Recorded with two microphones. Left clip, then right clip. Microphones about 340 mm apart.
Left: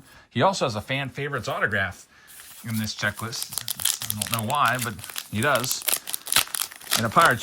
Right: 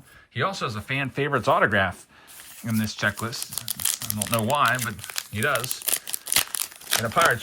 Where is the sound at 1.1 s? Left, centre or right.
Centre.